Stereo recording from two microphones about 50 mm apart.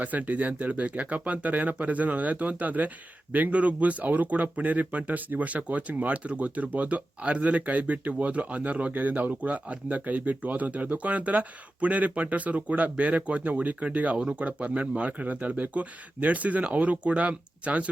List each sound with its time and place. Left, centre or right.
0.0 s speech: right